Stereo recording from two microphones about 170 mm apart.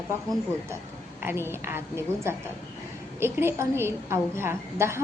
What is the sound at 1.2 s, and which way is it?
A woman's voice, 15° right (ahead or behind).